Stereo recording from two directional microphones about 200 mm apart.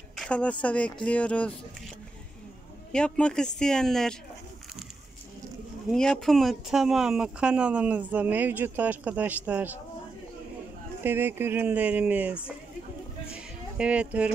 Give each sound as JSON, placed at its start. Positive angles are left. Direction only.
{"t": 0.1, "sound": "speech", "side_deg": 5}
{"t": 2.9, "sound": "speech", "side_deg": 5}
{"t": 5.9, "sound": "speech", "side_deg": 5}
{"t": 11.0, "sound": "speech", "side_deg": -10}
{"t": 13.3, "sound": "music", "side_deg": -5}